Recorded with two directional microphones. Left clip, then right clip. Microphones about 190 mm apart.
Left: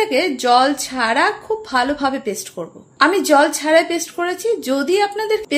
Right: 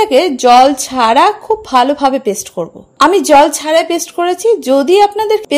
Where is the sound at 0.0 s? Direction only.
35° right (ahead or behind).